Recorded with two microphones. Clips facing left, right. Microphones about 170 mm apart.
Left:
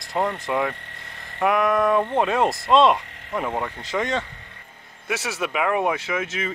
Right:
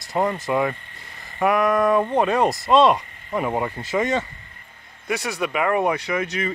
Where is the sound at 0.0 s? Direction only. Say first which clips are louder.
Right 2 dB; 5° right (ahead or behind).